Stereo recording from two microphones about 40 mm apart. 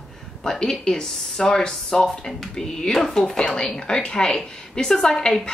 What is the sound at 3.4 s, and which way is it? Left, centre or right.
Speech, left.